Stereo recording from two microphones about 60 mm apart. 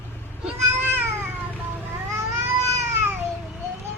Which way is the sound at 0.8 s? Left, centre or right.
Right.